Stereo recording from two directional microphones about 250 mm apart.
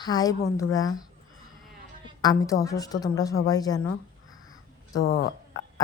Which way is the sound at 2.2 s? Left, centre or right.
Centre.